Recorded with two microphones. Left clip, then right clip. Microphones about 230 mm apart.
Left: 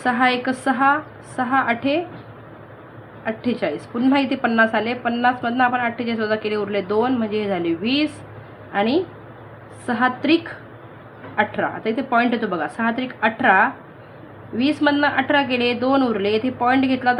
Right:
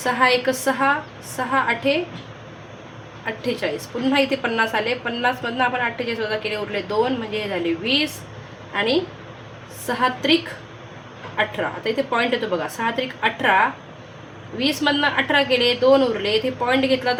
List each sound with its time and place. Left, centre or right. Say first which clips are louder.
0.0 s a woman's voice: right 1 dB; left
3.2 s a woman's voice: left 1 dB; left
9.8 s a woman's voice: even; left
11.3 s a woman's voice: left 2 dB; left